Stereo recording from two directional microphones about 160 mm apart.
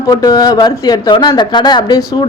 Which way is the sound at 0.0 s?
25° left (ahead or behind).